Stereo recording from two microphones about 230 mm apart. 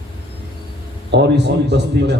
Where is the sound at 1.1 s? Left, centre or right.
Right.